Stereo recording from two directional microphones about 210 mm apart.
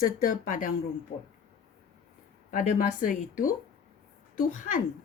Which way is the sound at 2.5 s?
40° left (ahead or behind).